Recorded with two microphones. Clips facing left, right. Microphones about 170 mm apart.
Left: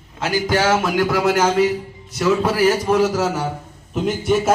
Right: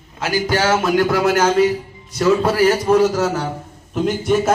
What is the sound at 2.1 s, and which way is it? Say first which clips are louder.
Speech: right 2 dB; 5° left (ahead or behind).